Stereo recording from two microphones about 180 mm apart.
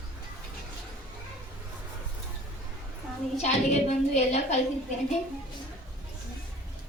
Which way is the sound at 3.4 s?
40° left (ahead or behind).